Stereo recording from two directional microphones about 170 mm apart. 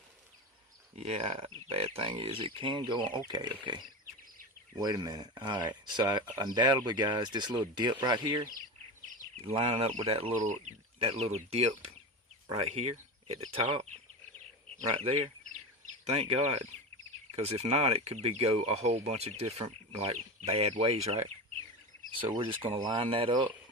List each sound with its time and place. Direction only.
0.9 s speech: 35° right (ahead or behind)
9.6 s speech: 35° right (ahead or behind)
16.0 s speech: 40° right (ahead or behind)